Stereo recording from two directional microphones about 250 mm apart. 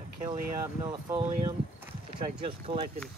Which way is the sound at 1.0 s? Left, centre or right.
Centre.